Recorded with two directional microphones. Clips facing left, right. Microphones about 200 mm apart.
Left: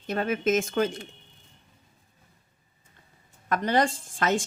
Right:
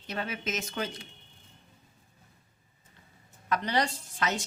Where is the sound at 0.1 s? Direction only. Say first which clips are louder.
Left 10 dB; 50° left (ahead or behind).